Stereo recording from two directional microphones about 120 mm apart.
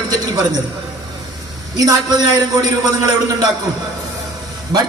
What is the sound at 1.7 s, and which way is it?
Speech, 30° right (ahead or behind).